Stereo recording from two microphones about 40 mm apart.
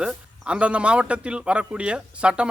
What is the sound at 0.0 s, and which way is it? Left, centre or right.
A man's voice, right.